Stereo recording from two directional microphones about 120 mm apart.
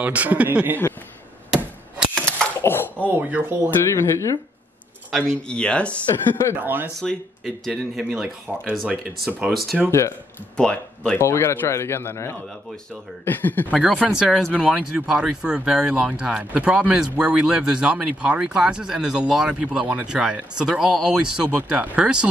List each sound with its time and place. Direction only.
0.0 s speech: 10° right (ahead or behind)
1.5 s chop: 5° right (ahead or behind)
2.6 s a sound: 20° left (ahead or behind)
3.1 s speech: 15° right (ahead or behind)
3.9 s speech: 25° left (ahead or behind)
5.5 s speech: 10° left (ahead or behind)
6.5 s speech: 15° right (ahead or behind)
7.0 s speech: 5° left (ahead or behind)
11.1 s speech: 20° left (ahead or behind)
13.7 s speech: centre (ahead or behind)
14.5 s speech: 10° right (ahead or behind)